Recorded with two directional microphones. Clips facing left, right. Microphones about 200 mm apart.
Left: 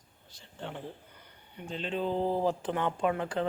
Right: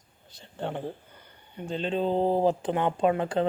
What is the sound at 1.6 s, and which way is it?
Speech, 30° right (ahead or behind).